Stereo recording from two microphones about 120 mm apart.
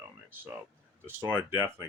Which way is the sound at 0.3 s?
20° right (ahead or behind).